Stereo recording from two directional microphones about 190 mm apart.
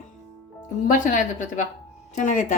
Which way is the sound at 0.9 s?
40° left (ahead or behind).